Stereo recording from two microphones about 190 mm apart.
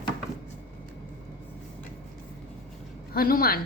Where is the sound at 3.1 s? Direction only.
50° left (ahead or behind).